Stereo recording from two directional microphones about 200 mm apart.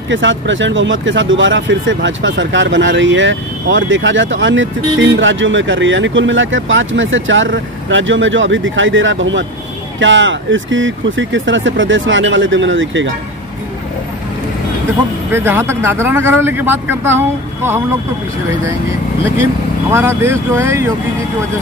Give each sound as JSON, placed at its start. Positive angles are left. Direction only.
{"t": 0.1, "sound": "speech", "side_deg": -65}
{"t": 15.3, "sound": "speech", "side_deg": -10}
{"t": 19.9, "sound": "speech", "side_deg": -15}